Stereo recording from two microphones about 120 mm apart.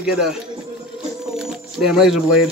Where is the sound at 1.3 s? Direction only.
5° right (ahead or behind).